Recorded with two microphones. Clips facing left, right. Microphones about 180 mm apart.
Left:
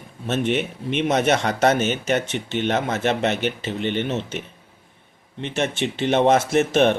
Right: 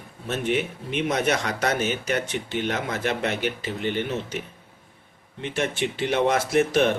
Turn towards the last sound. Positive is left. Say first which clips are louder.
# left 3 dB
turn(degrees=25)  # may be behind; listen again after turning